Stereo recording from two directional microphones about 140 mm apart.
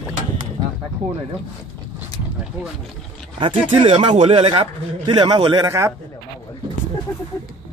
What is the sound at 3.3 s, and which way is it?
A man's voice, 40° right (ahead or behind).